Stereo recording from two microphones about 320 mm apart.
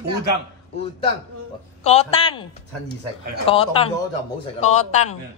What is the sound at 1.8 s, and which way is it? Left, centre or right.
Speech, centre.